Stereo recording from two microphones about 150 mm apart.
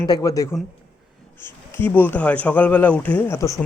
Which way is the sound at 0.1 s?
20° left (ahead or behind).